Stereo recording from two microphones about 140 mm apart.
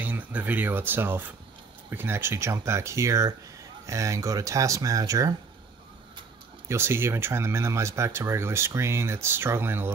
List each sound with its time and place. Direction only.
0.0 s speech: 10° right (ahead or behind)
6.7 s speech: 15° right (ahead or behind)